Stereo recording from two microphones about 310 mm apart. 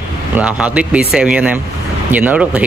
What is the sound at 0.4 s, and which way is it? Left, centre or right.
Speech, centre.